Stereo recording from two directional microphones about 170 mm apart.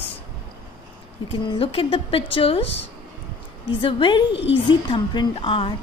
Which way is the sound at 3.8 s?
30° left (ahead or behind).